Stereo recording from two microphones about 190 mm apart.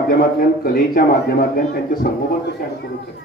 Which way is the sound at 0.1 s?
50° left (ahead or behind).